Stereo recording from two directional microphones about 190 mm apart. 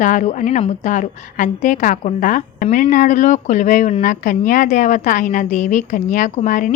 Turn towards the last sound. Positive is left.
turn(degrees=40)  # may be behind; listen again after turning